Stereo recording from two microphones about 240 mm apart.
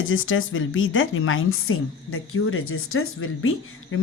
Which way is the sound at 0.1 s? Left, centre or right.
Left.